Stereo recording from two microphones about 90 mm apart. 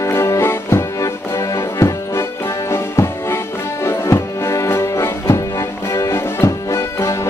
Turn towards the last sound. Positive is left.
turn(degrees=35)  # may be behind; listen again after turning